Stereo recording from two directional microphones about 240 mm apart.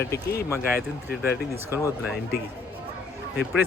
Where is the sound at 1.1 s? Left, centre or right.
Left.